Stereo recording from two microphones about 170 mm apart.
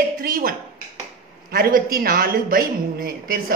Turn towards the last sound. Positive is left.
turn(degrees=-60)  # may be behind; listen again after turning